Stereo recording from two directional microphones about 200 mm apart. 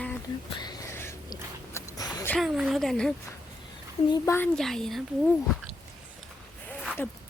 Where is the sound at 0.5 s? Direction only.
15° left (ahead or behind).